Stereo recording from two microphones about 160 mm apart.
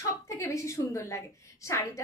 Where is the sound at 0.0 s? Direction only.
20° left (ahead or behind).